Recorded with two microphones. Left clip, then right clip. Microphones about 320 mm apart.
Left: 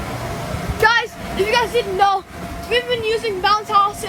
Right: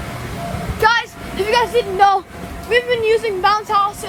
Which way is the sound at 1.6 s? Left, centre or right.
Right.